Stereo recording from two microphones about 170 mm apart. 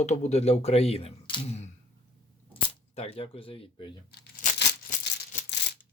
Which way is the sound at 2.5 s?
35° left (ahead or behind).